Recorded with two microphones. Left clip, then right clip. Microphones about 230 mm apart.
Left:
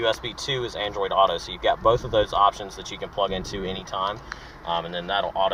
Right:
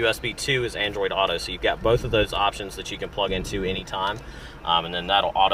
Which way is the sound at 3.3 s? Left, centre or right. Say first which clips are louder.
Right 3 dB; right.